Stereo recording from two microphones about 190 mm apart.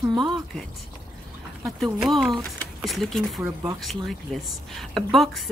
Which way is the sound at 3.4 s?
15° right (ahead or behind).